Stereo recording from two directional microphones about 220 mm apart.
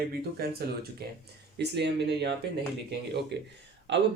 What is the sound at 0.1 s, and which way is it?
Speech, 45° right (ahead or behind).